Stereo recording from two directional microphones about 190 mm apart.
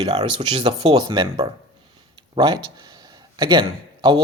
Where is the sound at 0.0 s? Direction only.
30° right (ahead or behind).